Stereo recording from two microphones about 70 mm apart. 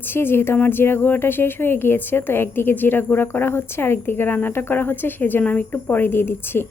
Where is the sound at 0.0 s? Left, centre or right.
Left.